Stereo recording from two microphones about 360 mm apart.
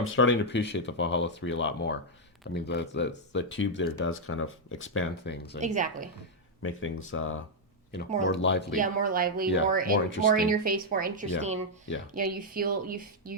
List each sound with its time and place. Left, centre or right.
0.0 s speech: left
5.5 s speech: centre
6.6 s speech: left
8.7 s speech: right